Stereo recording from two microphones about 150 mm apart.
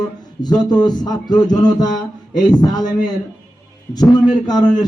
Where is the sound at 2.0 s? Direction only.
Centre (ahead or behind).